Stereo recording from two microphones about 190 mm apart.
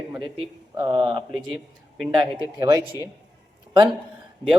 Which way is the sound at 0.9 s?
25° right (ahead or behind).